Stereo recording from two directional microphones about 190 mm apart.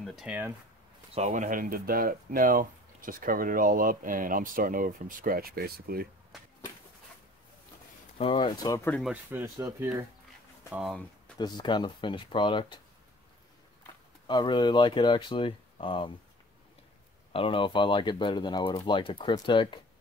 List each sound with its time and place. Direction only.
0.0 s speech: centre (ahead or behind)
1.1 s speech: 40° right (ahead or behind)
8.2 s speech: 25° left (ahead or behind)
9.0 s speech: 10° right (ahead or behind)
10.7 s speech: 5° right (ahead or behind)
11.3 s speech: 25° left (ahead or behind)
14.2 s speech: 25° left (ahead or behind)
17.3 s speech: 30° left (ahead or behind)